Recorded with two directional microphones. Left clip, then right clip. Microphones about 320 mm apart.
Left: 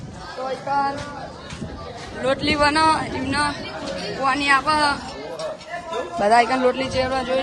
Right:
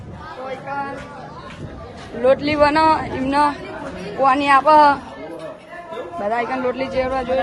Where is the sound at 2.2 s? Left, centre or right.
Centre.